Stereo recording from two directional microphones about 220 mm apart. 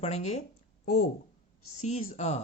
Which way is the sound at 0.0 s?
30° left (ahead or behind).